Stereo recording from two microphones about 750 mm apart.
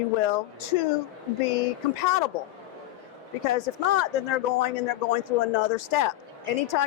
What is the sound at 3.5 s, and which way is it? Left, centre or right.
A man's voice, left.